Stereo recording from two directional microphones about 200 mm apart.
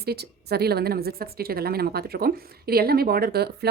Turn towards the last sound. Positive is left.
turn(degrees=-55)  # may be behind; listen again after turning